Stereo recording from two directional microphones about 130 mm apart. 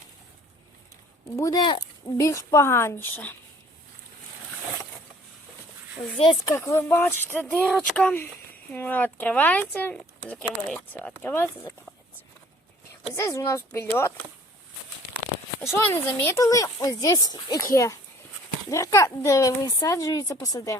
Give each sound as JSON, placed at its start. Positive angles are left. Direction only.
{"t": 1.4, "sound": "speech", "side_deg": 30}
{"t": 2.1, "sound": "speech", "side_deg": 25}
{"t": 6.4, "sound": "speech", "side_deg": 20}
{"t": 13.1, "sound": "speech", "side_deg": 20}
{"t": 15.6, "sound": "speech", "side_deg": 20}